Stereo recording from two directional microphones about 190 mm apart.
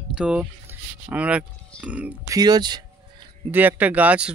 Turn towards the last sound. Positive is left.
turn(degrees=-5)  # may be behind; listen again after turning